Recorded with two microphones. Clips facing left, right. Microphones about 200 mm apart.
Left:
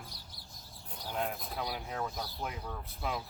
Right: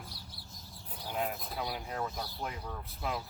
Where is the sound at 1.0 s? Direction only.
5° right (ahead or behind).